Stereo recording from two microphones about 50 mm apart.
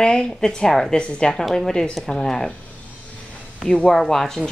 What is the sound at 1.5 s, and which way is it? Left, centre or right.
Speech, centre.